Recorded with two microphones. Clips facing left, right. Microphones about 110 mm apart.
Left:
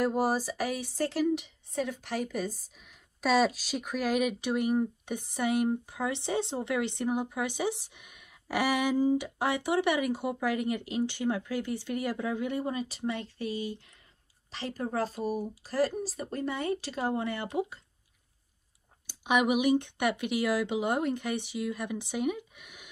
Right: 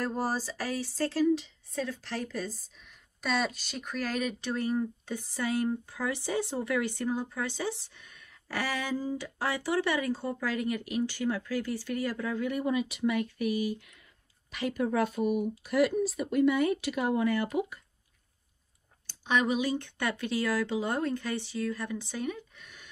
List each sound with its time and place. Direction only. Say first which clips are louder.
0.0 s speech: left 4 dB; 10° left (ahead or behind)
2.8 s speech: left 6 dB; 5° left (ahead or behind); by 17.7 s 25° left (ahead or behind)
19.0 s speech: left 2 dB; 15° left (ahead or behind)